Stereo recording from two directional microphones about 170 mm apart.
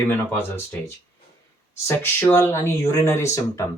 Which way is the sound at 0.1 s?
15° left (ahead or behind).